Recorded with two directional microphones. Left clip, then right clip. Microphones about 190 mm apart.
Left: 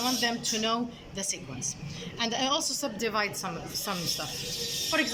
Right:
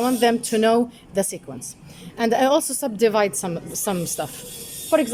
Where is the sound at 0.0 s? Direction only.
60° right (ahead or behind).